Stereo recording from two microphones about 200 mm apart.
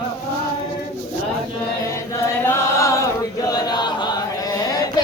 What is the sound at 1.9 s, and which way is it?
Chant, 15° left (ahead or behind).